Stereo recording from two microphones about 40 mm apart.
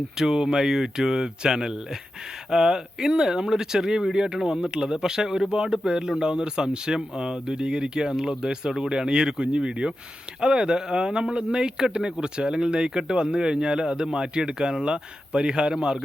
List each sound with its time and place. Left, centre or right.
0.2 s speech: centre